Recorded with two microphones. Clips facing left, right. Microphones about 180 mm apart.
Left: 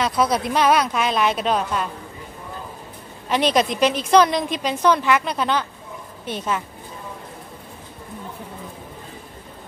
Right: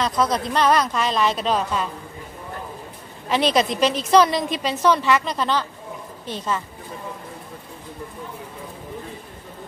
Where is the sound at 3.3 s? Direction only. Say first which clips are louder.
Even; centre (ahead or behind).